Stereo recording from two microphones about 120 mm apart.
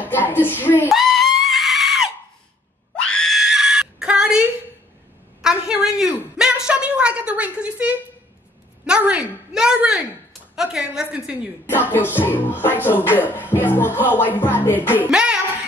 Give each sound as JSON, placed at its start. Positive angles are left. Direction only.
{"t": 0.0, "sound": "music", "side_deg": 15}
{"t": 0.9, "sound": "screaming", "side_deg": 0}
{"t": 3.1, "sound": "screaming", "side_deg": 5}
{"t": 5.4, "sound": "a sound", "side_deg": -5}
{"t": 11.9, "sound": "music", "side_deg": 15}
{"t": 15.0, "sound": "music", "side_deg": -5}